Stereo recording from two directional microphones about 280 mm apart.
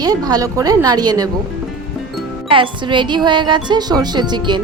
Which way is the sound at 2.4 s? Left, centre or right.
Centre.